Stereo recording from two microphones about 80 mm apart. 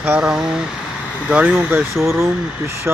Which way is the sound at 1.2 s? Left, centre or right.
Centre.